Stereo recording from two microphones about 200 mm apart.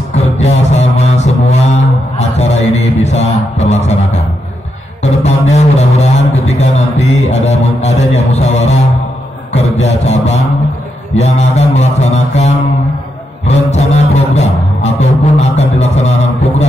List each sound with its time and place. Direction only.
0.1 s mantra: 35° left (ahead or behind)
5.0 s a sound: 35° left (ahead or behind)
9.5 s music: 35° left (ahead or behind)
13.7 s music: 35° left (ahead or behind)